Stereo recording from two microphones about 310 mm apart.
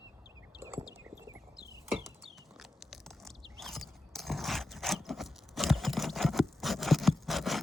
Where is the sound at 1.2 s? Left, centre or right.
Centre.